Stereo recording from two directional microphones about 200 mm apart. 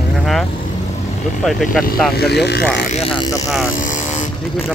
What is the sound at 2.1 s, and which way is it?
Speech, 55° left (ahead or behind).